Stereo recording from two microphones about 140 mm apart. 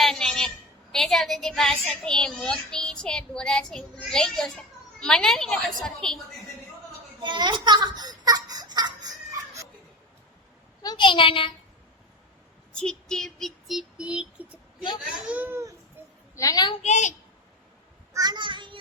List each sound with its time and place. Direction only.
0.0 s a sound: 5° left (ahead or behind)
0.9 s a child's voice: centre (ahead or behind)
7.2 s a sound: 35° right (ahead or behind)
10.8 s a child's voice: 35° left (ahead or behind)
12.7 s a child's voice: 5° left (ahead or behind); by 15.6 s 10° right (ahead or behind)
16.3 s a woman's voice: 25° left (ahead or behind)
16.8 s a woman's voice: 55° left (ahead or behind)
18.1 s a child's voice: 30° right (ahead or behind)